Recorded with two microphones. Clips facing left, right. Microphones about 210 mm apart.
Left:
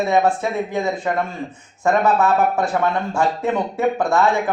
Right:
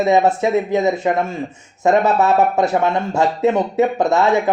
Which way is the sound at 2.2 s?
20° right (ahead or behind).